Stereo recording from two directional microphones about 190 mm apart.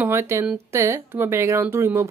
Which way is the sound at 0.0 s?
15° right (ahead or behind).